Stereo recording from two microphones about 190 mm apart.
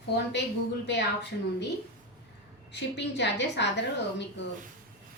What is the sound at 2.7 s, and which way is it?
A woman's voice, 65° left (ahead or behind).